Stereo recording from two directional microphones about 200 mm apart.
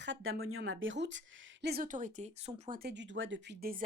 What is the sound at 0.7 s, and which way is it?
Speech, 75° right (ahead or behind).